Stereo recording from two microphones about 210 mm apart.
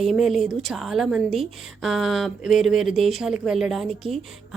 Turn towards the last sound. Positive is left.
turn(degrees=0)  # may be behind; listen again after turning